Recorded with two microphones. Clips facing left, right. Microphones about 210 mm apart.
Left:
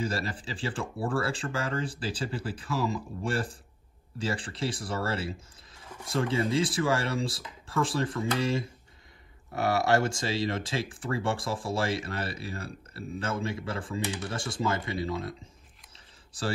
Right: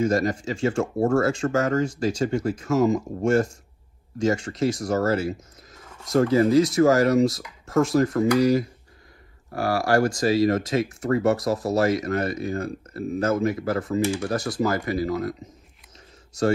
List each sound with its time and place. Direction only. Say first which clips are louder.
0.0 s speech: right 10 dB; 30° left (ahead or behind)